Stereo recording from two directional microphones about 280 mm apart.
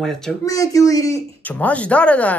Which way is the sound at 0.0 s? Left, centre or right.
Centre.